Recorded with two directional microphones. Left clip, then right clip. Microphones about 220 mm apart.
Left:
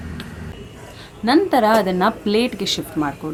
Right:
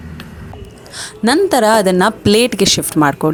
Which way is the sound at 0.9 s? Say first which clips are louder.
Right 3 dB; 40° right (ahead or behind).